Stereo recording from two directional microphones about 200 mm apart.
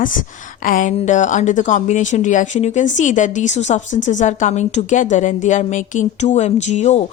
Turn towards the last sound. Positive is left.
turn(degrees=35)  # may be behind; listen again after turning